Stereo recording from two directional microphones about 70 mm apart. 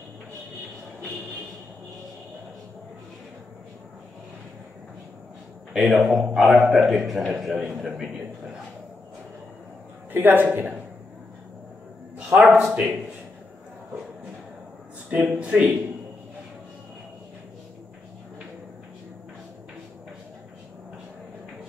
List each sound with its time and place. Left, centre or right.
5.7 s a man's voice: centre
10.1 s a man's voice: right
12.3 s speech: centre
15.0 s speech: right